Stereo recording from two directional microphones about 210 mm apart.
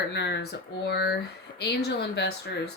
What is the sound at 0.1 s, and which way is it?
A woman's voice, 55° left (ahead or behind).